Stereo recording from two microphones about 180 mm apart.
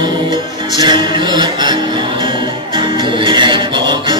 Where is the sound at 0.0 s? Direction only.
25° right (ahead or behind).